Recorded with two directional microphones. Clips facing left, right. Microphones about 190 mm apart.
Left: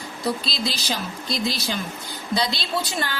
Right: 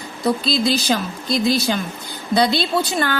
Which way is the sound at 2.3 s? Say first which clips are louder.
Right 8 dB; 55° right (ahead or behind).